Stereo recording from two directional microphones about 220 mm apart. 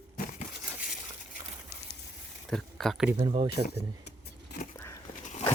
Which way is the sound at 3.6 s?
45° left (ahead or behind).